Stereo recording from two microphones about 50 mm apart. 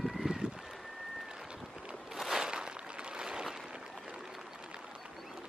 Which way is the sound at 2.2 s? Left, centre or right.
Centre.